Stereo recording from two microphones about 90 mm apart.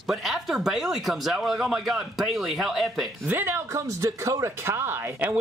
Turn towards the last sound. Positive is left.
turn(degrees=-25)  # may be behind; listen again after turning